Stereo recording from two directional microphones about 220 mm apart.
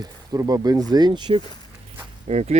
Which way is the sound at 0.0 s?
15° right (ahead or behind).